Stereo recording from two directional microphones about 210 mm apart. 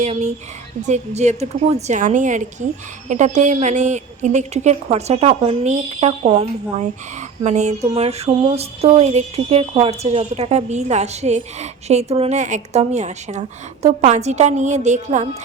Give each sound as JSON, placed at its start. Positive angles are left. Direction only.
{"t": 0.0, "sound": "speech", "side_deg": -35}